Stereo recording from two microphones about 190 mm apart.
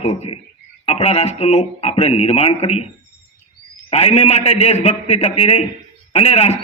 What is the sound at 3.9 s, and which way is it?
Speech, 35° left (ahead or behind).